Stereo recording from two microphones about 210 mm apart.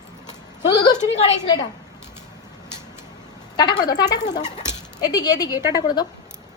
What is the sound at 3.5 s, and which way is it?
Speech, 20° left (ahead or behind).